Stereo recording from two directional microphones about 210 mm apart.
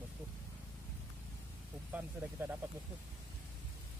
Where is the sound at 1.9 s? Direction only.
10° right (ahead or behind).